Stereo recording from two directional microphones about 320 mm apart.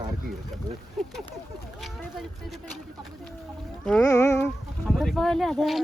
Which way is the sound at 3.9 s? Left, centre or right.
Centre.